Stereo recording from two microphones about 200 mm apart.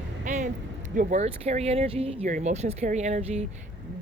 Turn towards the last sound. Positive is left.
turn(degrees=-35)  # may be behind; listen again after turning